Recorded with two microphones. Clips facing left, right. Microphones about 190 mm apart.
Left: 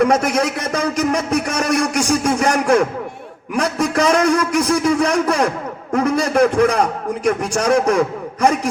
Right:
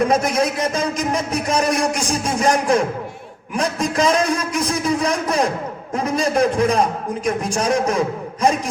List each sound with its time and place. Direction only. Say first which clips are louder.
0.0 s a man's voice: left 2 dB; 65° left (ahead or behind)